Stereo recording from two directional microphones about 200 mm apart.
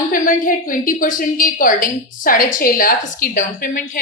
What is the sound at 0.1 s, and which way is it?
A woman's voice, 45° left (ahead or behind).